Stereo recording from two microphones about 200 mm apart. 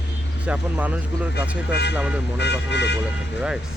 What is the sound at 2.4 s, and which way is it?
Speech, 60° left (ahead or behind).